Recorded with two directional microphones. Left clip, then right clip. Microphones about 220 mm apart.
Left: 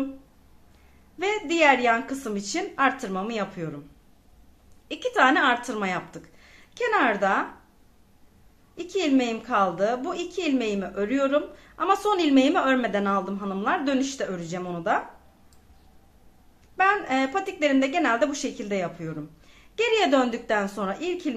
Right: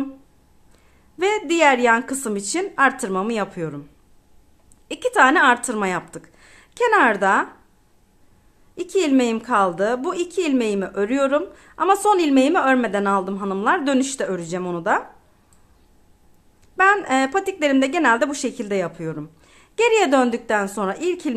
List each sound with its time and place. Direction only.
1.1 s a woman's voice: 40° right (ahead or behind)
4.8 s speech: 35° right (ahead or behind)
8.7 s a woman's voice: 35° right (ahead or behind)
16.7 s a woman's voice: 40° right (ahead or behind)